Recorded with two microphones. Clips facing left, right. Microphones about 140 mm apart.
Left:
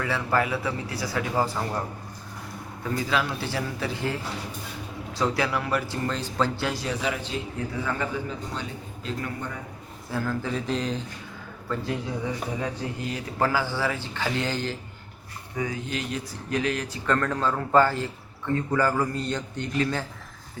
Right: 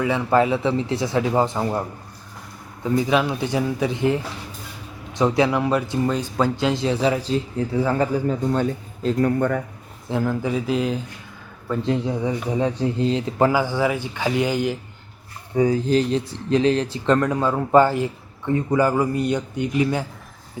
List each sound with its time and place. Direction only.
0.0 s speech: 20° right (ahead or behind)
2.8 s speech: 20° right (ahead or behind); by 9.5 s 45° right (ahead or behind)
10.1 s a man's voice: 20° right (ahead or behind)
11.7 s a man's voice: 25° right (ahead or behind)
15.5 s speech: 35° right (ahead or behind)
17.2 s a man's voice: 15° right (ahead or behind)